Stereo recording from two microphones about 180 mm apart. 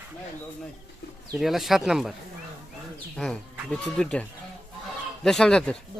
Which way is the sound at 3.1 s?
5° left (ahead or behind).